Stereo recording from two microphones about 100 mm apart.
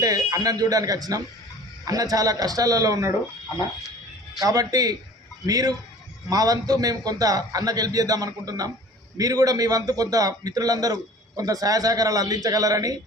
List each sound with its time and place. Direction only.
0.0 s a man's voice: 35° right (ahead or behind)
4.4 s a man's voice: 35° right (ahead or behind)